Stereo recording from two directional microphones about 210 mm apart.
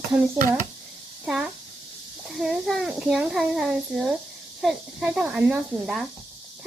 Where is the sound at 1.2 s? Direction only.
5° right (ahead or behind).